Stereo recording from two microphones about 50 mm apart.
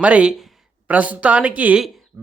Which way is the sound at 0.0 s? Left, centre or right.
Right.